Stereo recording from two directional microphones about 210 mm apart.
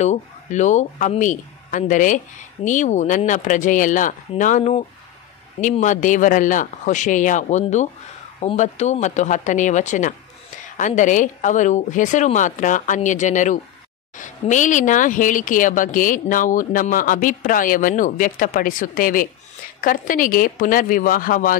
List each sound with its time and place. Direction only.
0.0 s speech: 35° left (ahead or behind)